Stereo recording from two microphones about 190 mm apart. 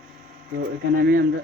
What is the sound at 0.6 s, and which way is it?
Speech, 55° right (ahead or behind).